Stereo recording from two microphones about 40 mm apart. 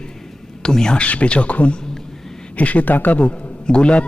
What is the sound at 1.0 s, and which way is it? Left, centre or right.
A man's voice, left.